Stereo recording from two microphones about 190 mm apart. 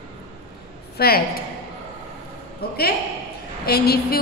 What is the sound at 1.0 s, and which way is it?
Speech, 55° left (ahead or behind).